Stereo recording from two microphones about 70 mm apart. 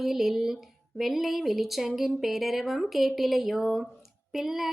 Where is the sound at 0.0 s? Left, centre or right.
Centre.